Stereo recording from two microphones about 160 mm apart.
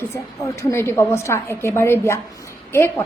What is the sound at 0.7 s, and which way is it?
A woman's voice, 15° left (ahead or behind).